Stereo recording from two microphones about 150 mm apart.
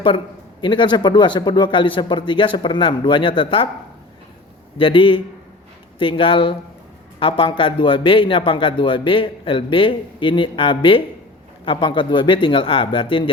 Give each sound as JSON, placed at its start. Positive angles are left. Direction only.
{"t": 0.6, "sound": "a man's voice", "side_deg": 30}
{"t": 4.8, "sound": "a man's voice", "side_deg": 35}